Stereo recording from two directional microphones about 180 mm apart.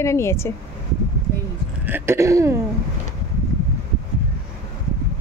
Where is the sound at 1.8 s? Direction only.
15° right (ahead or behind).